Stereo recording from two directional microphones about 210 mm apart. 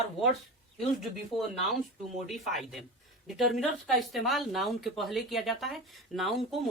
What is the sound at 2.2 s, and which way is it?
Speech, centre (ahead or behind).